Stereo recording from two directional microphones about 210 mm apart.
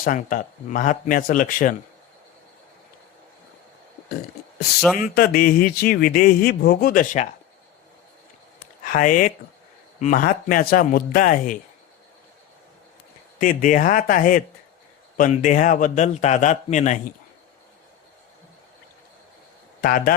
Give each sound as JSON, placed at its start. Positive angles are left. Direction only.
{"t": 0.0, "sound": "a man's voice", "side_deg": 40}
{"t": 4.9, "sound": "speech", "side_deg": 45}
{"t": 8.8, "sound": "a man's voice", "side_deg": 40}
{"t": 13.4, "sound": "a man's voice", "side_deg": 40}
{"t": 19.8, "sound": "speech", "side_deg": 45}